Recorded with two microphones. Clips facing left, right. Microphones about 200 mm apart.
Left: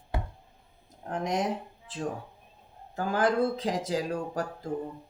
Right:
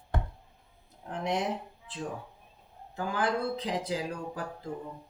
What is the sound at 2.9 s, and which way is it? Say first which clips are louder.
Speech: left 4 dB; 45° left (ahead or behind).